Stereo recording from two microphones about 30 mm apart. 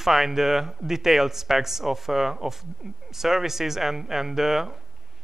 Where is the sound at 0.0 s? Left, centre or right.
Centre.